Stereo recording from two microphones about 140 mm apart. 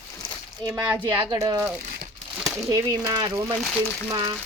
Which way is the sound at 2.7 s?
20° right (ahead or behind).